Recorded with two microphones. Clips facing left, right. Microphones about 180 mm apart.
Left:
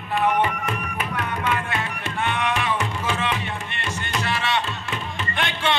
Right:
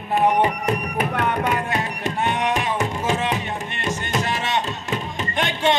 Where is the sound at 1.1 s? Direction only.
65° right (ahead or behind).